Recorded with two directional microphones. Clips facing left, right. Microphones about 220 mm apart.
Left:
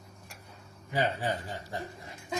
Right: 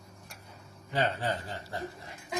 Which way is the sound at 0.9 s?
10° left (ahead or behind).